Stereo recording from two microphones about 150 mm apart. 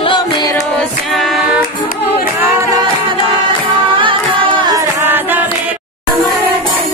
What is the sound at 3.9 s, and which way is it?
Carnatic music, 35° right (ahead or behind).